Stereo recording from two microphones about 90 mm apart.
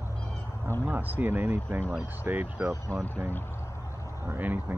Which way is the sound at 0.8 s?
20° right (ahead or behind).